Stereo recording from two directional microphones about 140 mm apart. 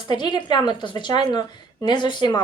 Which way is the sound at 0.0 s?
35° left (ahead or behind).